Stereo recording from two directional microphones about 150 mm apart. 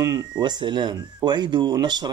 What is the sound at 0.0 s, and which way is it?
Speech, 25° right (ahead or behind).